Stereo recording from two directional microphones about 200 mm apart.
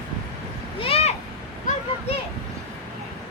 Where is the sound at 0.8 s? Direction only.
30° left (ahead or behind).